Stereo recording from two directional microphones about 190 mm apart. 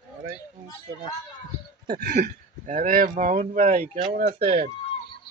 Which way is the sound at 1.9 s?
50° right (ahead or behind).